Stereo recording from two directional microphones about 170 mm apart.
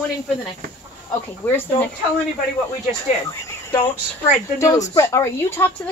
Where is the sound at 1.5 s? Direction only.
10° left (ahead or behind).